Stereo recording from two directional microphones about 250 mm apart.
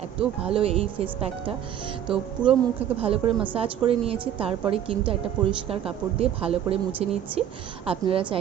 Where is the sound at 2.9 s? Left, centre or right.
Right.